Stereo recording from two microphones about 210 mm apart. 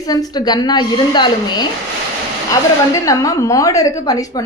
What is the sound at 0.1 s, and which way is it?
A woman's voice, 20° left (ahead or behind).